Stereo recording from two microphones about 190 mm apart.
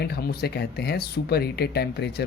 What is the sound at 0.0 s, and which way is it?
Speech, 55° left (ahead or behind).